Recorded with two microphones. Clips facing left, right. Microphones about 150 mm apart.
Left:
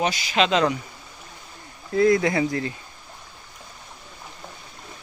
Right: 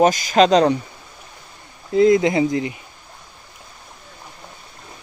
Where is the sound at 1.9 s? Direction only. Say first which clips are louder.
Right 4 dB; 20° right (ahead or behind).